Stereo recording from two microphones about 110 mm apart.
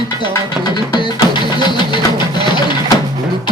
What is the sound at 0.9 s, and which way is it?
Music, 45° left (ahead or behind).